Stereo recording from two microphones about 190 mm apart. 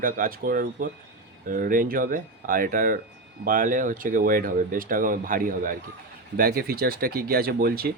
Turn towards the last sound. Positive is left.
turn(degrees=-55)  # may be behind; listen again after turning